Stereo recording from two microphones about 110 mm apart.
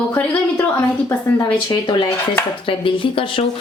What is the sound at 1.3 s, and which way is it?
Speech, 35° left (ahead or behind).